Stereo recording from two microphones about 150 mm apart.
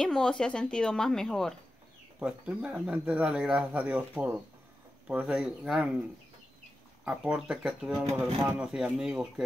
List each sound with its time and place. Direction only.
0.0 s speech: 5° left (ahead or behind)
7.1 s speech: 5° right (ahead or behind)